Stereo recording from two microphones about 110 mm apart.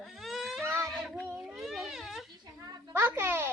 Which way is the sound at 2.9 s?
20° right (ahead or behind).